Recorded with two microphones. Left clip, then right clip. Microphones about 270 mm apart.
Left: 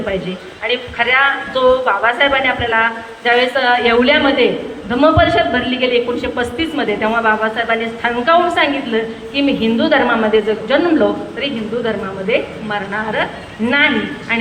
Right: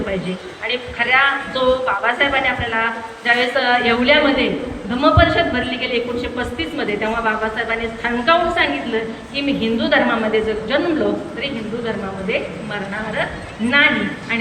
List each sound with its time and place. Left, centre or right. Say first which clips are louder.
0.6 s a woman's voice: left 4 dB; centre